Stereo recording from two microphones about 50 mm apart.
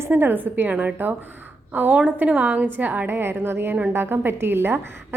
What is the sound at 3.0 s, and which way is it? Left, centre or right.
A woman's voice, right.